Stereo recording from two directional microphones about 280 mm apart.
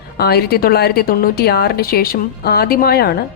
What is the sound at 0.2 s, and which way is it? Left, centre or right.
A woman's voice, left.